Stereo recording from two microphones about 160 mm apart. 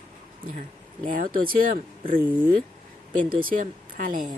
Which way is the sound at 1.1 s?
60° right (ahead or behind).